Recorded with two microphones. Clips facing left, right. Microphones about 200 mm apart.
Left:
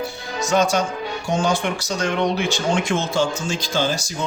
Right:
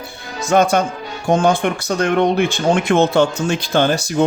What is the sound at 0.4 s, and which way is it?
Speech, 55° right (ahead or behind).